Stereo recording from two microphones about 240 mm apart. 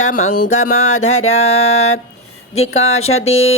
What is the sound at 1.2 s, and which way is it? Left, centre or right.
Music, left.